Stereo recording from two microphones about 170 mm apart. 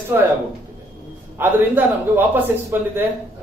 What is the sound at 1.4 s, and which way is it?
A man's voice, 10° right (ahead or behind).